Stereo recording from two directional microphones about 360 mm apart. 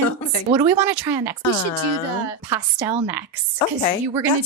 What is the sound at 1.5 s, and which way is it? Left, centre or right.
Speech, centre.